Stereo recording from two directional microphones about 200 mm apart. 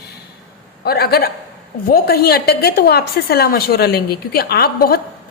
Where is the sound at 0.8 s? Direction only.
50° left (ahead or behind).